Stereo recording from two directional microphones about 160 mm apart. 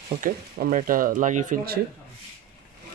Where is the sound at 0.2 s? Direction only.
55° right (ahead or behind).